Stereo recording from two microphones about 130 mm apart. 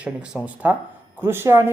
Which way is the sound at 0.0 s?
10° right (ahead or behind).